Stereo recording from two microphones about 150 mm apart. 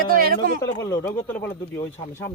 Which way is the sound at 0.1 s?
80° right.